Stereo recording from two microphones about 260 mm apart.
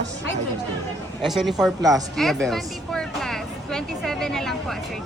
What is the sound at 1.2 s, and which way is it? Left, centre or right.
A woman's voice, centre.